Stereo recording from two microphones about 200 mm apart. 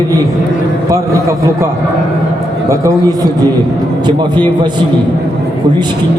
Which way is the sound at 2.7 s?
15° right (ahead or behind).